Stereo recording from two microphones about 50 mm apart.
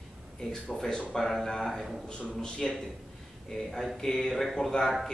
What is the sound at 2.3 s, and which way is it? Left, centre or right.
Speech, centre.